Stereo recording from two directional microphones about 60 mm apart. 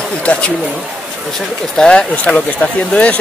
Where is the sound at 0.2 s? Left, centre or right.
Centre.